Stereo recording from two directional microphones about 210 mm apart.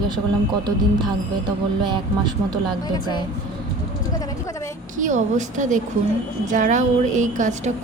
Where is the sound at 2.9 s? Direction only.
20° left (ahead or behind).